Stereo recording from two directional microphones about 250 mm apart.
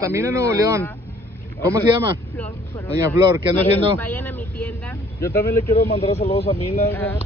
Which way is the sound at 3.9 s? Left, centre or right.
Centre.